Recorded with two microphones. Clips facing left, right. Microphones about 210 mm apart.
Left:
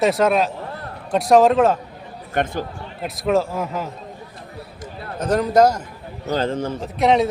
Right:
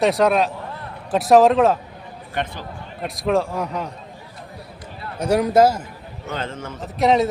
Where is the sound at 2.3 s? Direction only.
45° left (ahead or behind).